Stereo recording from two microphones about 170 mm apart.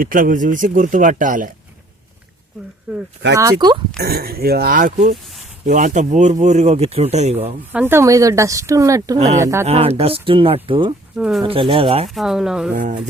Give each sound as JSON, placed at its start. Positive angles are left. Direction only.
{"t": 0.0, "sound": "speech", "side_deg": -55}
{"t": 2.9, "sound": "speech", "side_deg": -5}
{"t": 3.3, "sound": "speech", "side_deg": -20}
{"t": 4.0, "sound": "speech", "side_deg": -65}
{"t": 5.2, "sound": "a sound", "side_deg": 0}
{"t": 5.6, "sound": "speech", "side_deg": -45}
{"t": 7.7, "sound": "speech", "side_deg": -10}
{"t": 9.1, "sound": "speech", "side_deg": -45}
{"t": 9.4, "sound": "speech", "side_deg": -15}
{"t": 9.6, "sound": "speech", "side_deg": -35}
{"t": 11.2, "sound": "speech", "side_deg": 0}
{"t": 11.4, "sound": "speech", "side_deg": -30}
{"t": 12.0, "sound": "speech", "side_deg": 0}
{"t": 12.7, "sound": "speech", "side_deg": -55}